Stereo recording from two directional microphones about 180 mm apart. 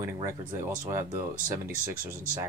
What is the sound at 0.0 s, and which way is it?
Speech, 15° right (ahead or behind).